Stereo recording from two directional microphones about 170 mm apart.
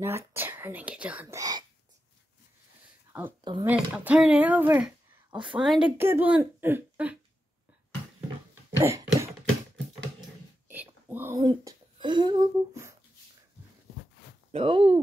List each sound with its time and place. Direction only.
0.0 s speech: 15° right (ahead or behind)
3.1 s a sound: 10° right (ahead or behind)
3.6 s speech: 10° right (ahead or behind)
8.7 s a sound: 15° right (ahead or behind)
10.7 s whispering: 10° right (ahead or behind)
11.4 s speech: 25° right (ahead or behind)
14.5 s speech: 30° right (ahead or behind)